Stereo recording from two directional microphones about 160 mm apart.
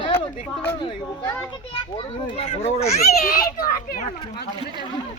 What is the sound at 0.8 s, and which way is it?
Speech, 30° left (ahead or behind).